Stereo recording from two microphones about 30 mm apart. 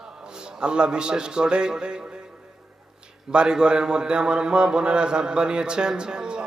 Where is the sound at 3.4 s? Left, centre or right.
Right.